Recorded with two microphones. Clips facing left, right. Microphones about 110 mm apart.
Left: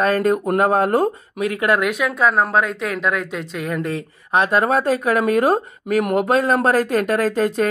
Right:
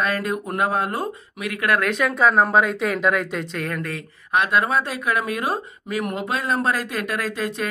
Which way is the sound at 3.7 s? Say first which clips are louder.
Left 6 dB; 25° left (ahead or behind).